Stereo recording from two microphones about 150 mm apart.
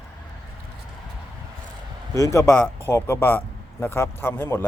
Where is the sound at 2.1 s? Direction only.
20° left (ahead or behind).